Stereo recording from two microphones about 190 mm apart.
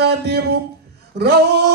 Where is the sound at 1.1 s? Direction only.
55° right (ahead or behind).